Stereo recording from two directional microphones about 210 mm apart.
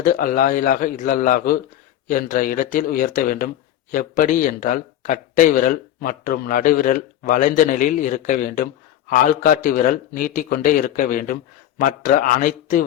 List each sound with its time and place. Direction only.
0.0 s speech: 40° left (ahead or behind)